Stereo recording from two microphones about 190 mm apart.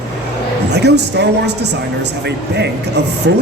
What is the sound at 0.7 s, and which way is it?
Speech, 60° right (ahead or behind).